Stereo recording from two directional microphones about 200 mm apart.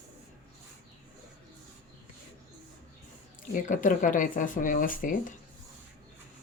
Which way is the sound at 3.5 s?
40° left (ahead or behind).